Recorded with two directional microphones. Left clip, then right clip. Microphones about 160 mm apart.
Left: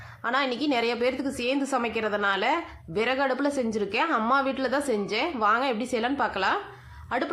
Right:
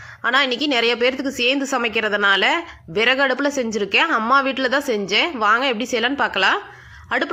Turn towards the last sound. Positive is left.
turn(degrees=-15)  # may be behind; listen again after turning